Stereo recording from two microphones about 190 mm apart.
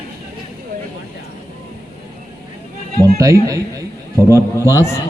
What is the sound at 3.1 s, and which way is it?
Speech, 15° right (ahead or behind).